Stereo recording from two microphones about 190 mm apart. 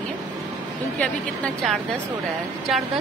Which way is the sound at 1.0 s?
5° left (ahead or behind).